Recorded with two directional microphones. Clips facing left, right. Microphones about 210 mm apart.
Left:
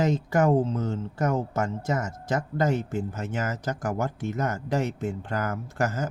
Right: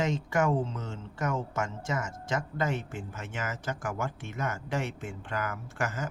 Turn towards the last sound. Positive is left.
turn(degrees=40)  # may be behind; listen again after turning